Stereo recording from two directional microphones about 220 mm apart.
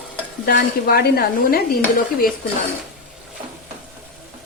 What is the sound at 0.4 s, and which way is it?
A woman's voice, 45° left (ahead or behind).